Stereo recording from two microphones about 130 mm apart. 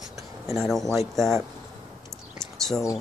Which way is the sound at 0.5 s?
Centre (ahead or behind).